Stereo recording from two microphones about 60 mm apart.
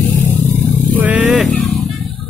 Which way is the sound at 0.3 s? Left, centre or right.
Left.